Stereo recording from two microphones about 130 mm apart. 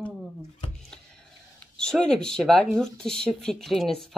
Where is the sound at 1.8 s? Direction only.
5° left (ahead or behind).